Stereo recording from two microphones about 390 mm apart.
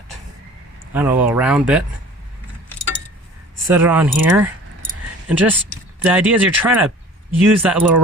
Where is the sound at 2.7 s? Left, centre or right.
Left.